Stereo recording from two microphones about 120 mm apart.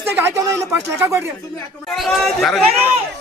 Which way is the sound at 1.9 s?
Centre (ahead or behind).